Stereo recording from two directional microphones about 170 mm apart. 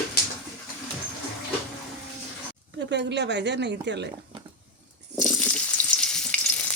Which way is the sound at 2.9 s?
90° right.